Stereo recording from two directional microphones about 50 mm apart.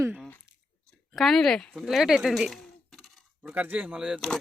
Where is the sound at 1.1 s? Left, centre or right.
Centre.